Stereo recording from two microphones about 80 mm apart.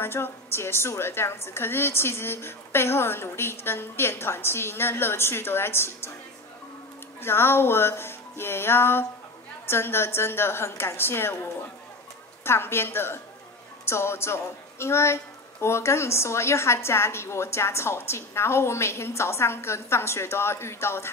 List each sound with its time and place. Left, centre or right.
0.0 s a woman's voice: left
7.2 s music: left
9.7 s a woman's voice: left
12.4 s a woman's voice: left